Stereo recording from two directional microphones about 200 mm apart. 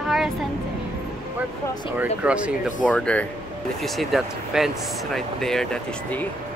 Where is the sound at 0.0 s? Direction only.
Centre (ahead or behind).